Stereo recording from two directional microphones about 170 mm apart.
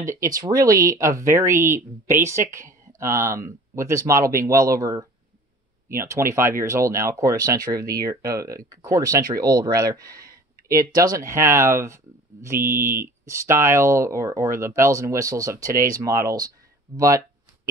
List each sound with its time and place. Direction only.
0.0 s speech: 20° right (ahead or behind)